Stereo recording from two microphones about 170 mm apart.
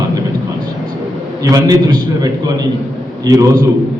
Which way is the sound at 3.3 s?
20° right (ahead or behind).